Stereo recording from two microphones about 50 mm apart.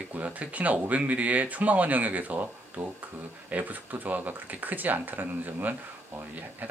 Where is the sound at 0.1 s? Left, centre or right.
Right.